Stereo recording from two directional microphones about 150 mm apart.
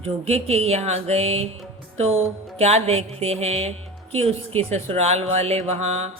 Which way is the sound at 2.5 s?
45° right (ahead or behind).